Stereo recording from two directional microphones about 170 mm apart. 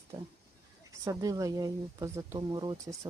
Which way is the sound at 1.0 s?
20° right (ahead or behind).